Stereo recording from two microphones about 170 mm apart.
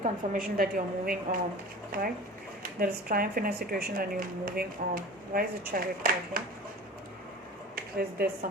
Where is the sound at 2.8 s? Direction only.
60° right (ahead or behind).